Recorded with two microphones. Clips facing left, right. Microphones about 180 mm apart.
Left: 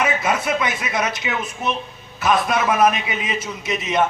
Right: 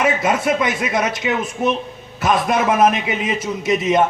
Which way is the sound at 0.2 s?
45° right (ahead or behind).